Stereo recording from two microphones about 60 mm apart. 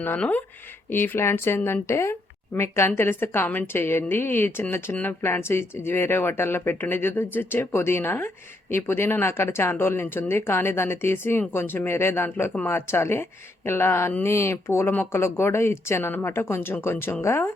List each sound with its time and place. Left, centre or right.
0.2 s speech: left
0.9 s a woman's voice: left